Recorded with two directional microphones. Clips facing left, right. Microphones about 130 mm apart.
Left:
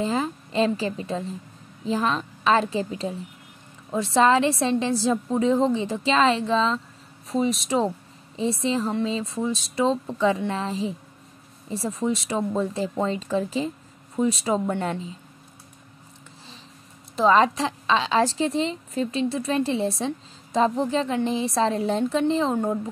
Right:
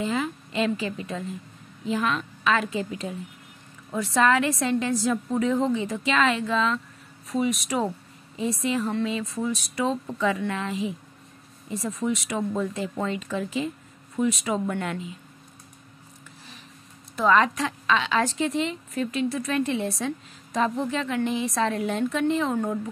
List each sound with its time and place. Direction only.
0.0 s a woman's voice: 35° left (ahead or behind)
17.1 s a woman's voice: 30° left (ahead or behind)